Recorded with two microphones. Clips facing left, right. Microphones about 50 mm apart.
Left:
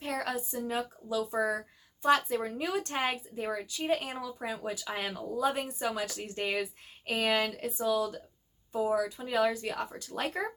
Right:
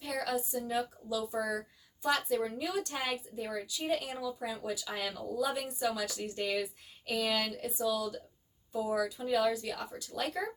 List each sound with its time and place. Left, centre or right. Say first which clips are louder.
0.0 s speech: left 1 dB; left